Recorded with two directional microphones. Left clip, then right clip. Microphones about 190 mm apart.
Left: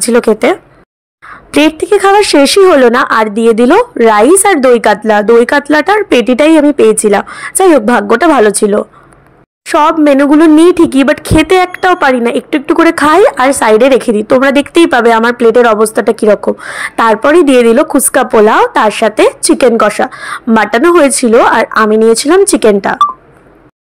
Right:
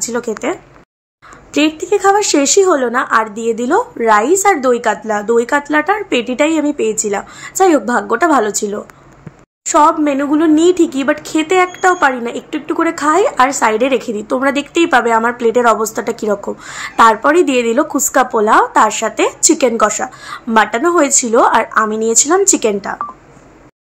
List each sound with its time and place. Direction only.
0.0 s speech: 45° left (ahead or behind)